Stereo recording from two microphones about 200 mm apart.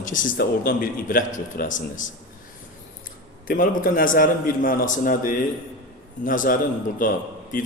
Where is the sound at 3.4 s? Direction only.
45° left (ahead or behind).